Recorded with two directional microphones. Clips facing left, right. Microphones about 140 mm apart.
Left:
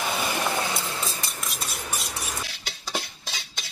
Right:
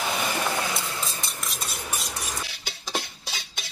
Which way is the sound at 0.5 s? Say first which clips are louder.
Left 1 dB; 25° left (ahead or behind).